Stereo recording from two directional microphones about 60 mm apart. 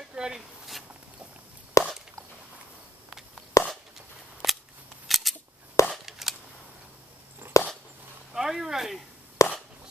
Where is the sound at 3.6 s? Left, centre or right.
Left.